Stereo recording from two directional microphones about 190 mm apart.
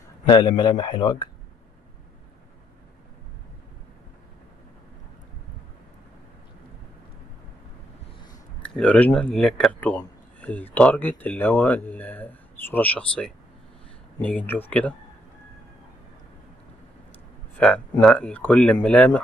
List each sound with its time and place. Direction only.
0.3 s a man's voice: 25° left (ahead or behind)
8.6 s speech: 5° left (ahead or behind)
17.6 s speech: 5° left (ahead or behind)